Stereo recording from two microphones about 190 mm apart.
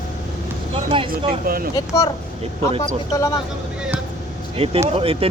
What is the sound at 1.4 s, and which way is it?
Speech, 50° right (ahead or behind).